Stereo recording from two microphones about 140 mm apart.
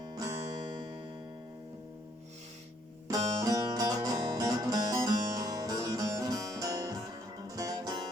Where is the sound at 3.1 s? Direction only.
25° right (ahead or behind).